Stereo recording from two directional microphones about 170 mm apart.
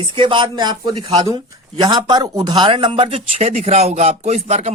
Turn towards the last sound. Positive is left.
turn(degrees=-40)  # may be behind; listen again after turning